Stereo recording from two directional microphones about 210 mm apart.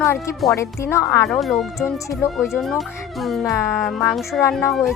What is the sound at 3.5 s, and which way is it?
Speech, 15° left (ahead or behind).